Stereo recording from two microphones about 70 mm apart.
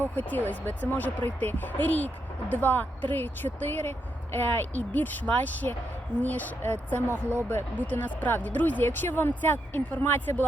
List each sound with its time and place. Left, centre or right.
0.2 s speech: left